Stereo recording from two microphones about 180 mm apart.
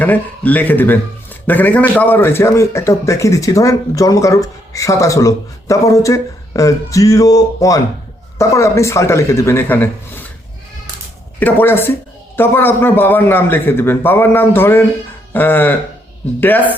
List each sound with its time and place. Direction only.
0.0 s a man's voice: 10° left (ahead or behind)
11.3 s speech: 10° left (ahead or behind)